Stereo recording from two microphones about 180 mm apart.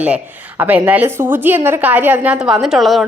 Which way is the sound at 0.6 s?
10° right (ahead or behind).